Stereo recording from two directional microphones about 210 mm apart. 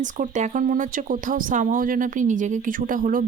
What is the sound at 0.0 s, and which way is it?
Speech, 35° right (ahead or behind).